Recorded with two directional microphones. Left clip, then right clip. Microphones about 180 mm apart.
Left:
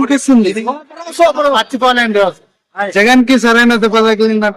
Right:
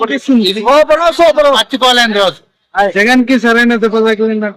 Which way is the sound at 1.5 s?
5° left (ahead or behind).